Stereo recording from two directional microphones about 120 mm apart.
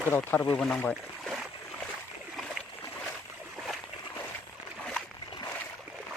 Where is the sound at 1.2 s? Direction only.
Centre (ahead or behind).